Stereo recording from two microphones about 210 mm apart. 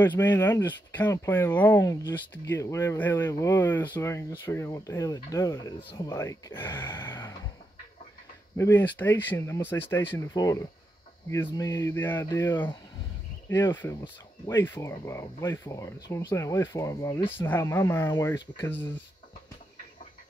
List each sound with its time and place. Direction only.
0.0 s speech: 10° left (ahead or behind)
8.5 s speech: 10° left (ahead or behind)